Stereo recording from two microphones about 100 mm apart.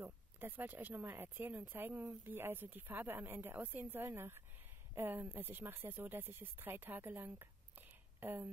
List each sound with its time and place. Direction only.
0.0 s speech: 20° right (ahead or behind)